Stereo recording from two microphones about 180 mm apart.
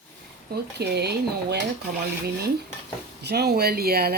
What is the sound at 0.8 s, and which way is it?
Speech, 65° right (ahead or behind).